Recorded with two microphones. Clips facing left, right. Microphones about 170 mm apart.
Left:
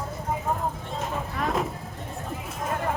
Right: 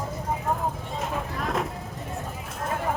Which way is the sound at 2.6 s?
Centre (ahead or behind).